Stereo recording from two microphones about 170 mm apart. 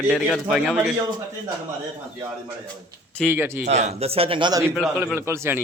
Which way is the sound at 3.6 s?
40° right (ahead or behind).